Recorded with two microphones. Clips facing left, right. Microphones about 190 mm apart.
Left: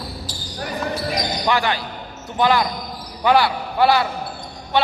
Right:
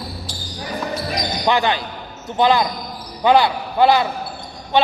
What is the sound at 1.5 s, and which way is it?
A man's voice, 20° right (ahead or behind).